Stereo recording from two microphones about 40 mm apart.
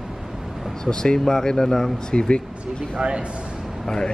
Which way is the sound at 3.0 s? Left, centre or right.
Right.